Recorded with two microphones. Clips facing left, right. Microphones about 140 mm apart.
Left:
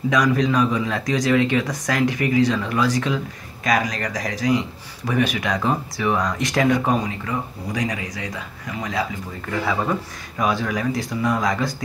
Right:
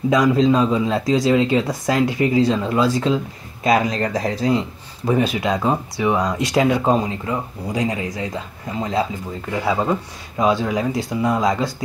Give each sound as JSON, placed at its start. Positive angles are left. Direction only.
{"t": 0.1, "sound": "speech", "side_deg": -25}